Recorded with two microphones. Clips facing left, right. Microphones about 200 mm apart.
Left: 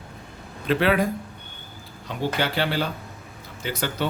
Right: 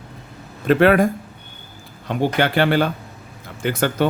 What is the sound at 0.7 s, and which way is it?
Speech, 50° right (ahead or behind).